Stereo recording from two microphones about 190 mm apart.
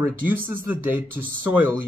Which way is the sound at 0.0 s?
10° right (ahead or behind).